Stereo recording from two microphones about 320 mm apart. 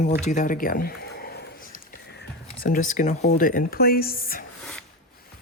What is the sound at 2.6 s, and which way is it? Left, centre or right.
Speech, left.